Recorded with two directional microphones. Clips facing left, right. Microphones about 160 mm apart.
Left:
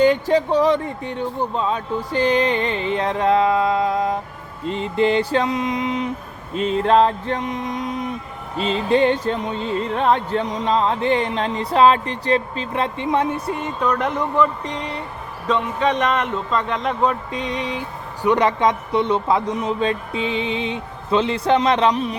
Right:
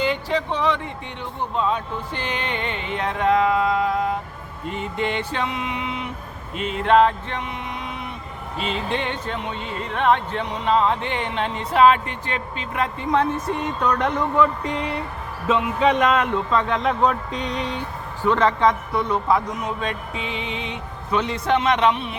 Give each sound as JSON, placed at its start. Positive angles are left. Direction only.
{"t": 0.0, "sound": "music", "side_deg": 45}
{"t": 13.1, "sound": "a man's voice", "side_deg": 10}
{"t": 18.2, "sound": "speech", "side_deg": 15}